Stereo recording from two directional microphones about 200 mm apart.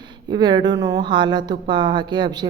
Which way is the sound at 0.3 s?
20° right (ahead or behind).